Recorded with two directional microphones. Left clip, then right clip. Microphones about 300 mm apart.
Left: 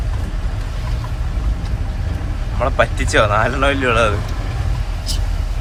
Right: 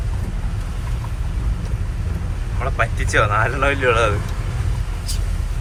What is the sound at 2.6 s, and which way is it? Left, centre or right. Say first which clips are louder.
Speech: left 5 dB; centre.